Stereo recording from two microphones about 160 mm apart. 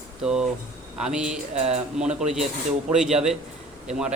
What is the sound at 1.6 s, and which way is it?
Speech, 45° right (ahead or behind).